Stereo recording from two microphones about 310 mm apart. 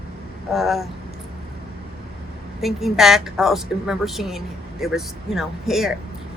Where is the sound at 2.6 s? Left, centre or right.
Centre.